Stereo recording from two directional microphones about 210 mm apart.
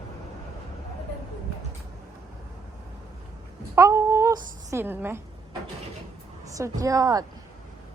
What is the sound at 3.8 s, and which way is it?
A woman's voice, 15° right (ahead or behind).